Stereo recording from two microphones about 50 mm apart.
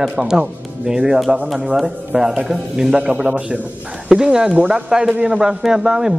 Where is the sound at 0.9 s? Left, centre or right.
Right.